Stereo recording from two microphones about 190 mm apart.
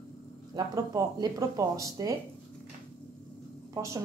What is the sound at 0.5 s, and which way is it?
Speech, 20° right (ahead or behind).